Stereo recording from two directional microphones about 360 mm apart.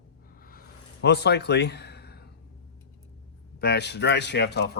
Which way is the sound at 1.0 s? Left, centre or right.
Left.